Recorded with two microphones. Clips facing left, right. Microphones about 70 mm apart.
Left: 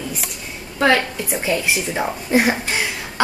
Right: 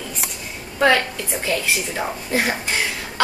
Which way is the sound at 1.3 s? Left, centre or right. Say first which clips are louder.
Left 2 dB; centre.